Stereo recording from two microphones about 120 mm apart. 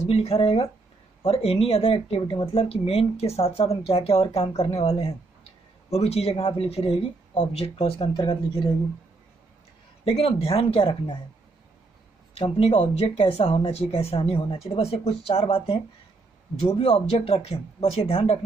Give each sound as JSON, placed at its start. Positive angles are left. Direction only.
{"t": 0.0, "sound": "speech", "side_deg": 60}
{"t": 10.0, "sound": "speech", "side_deg": 55}
{"t": 12.4, "sound": "speech", "side_deg": 55}